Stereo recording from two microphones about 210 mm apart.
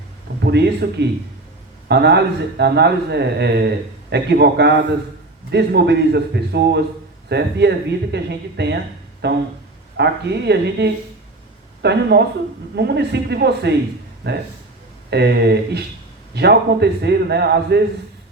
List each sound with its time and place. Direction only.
0.4 s speech: 50° right (ahead or behind)